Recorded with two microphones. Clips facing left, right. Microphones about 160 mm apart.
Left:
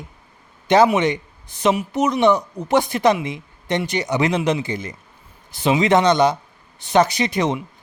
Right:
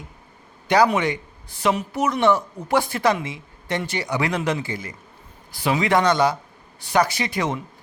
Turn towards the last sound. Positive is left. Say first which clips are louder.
# left 4 dB
turn(degrees=20)  # may be behind; listen again after turning